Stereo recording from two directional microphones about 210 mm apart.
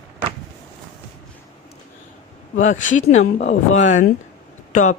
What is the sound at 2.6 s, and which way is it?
Speech, 35° left (ahead or behind).